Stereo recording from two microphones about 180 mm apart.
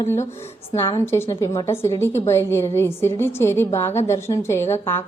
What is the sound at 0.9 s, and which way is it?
A woman's voice, 15° left (ahead or behind).